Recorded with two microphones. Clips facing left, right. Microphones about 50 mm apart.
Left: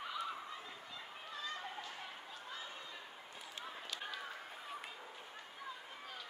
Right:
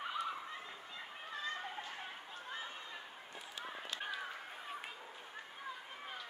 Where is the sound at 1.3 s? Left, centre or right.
Right.